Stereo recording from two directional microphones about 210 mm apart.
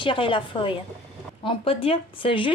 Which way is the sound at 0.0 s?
25° left (ahead or behind).